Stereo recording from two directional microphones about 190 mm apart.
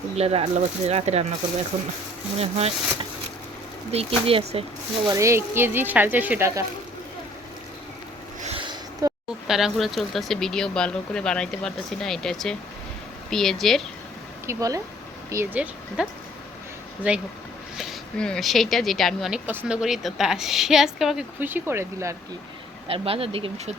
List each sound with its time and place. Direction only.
0.2 s speech: 30° right (ahead or behind)
2.4 s speech: 35° right (ahead or behind)
5.0 s speech: 15° right (ahead or behind)
8.4 s a sound: 30° right (ahead or behind)
9.5 s a woman's voice: centre (ahead or behind)
14.4 s speech: 15° right (ahead or behind)
17.0 s a woman's voice: 10° right (ahead or behind)
22.9 s speech: 30° right (ahead or behind)